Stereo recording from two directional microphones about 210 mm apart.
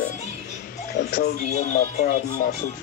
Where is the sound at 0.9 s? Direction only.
50° left (ahead or behind).